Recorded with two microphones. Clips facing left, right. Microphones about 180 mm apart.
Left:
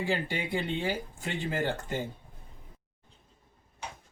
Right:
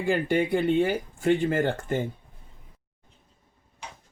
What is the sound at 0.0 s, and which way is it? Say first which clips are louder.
Speech: right 7 dB; 55° right (ahead or behind).